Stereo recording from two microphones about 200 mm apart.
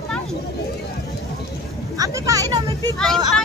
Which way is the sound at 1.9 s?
15° right (ahead or behind).